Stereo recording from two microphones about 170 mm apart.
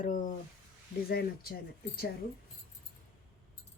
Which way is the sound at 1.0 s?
65° left (ahead or behind).